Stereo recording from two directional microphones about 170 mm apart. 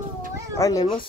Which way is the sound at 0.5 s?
20° left (ahead or behind).